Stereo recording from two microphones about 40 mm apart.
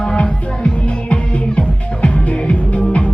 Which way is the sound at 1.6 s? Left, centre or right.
Left.